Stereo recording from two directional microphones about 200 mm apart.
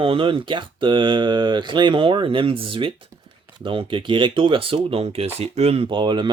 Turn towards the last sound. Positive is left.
turn(degrees=-20)  # may be behind; listen again after turning